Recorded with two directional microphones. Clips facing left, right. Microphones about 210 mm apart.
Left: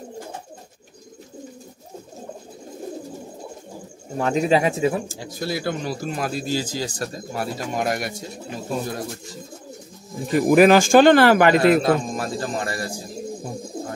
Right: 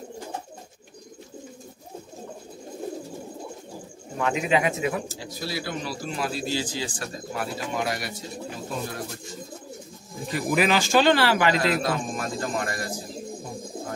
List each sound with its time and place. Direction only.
4.2 s speech: 35° left (ahead or behind)
5.0 s speech: 50° left (ahead or behind)
10.3 s speech: 50° left (ahead or behind)
11.8 s speech: 30° left (ahead or behind)